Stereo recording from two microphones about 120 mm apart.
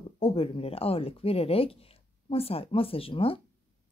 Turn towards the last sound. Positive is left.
turn(degrees=50)  # may be behind; listen again after turning